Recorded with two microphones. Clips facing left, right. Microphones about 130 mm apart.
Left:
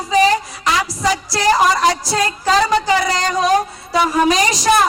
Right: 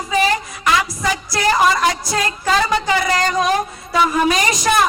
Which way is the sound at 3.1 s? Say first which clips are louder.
Left 1 dB; 35° left (ahead or behind).